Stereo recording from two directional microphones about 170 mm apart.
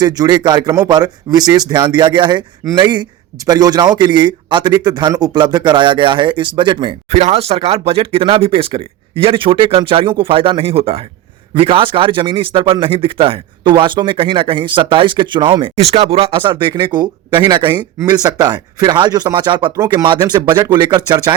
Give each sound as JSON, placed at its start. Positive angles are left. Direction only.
{"t": 0.0, "sound": "a man's voice", "side_deg": -25}
{"t": 7.1, "sound": "a man's voice", "side_deg": -40}